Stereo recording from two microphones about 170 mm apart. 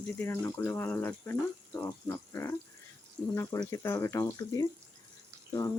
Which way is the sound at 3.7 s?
15° left (ahead or behind).